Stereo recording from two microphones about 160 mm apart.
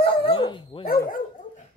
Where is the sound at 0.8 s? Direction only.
65° left (ahead or behind).